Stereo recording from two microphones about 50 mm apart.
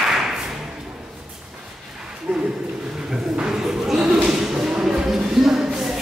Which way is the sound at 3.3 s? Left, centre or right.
Centre.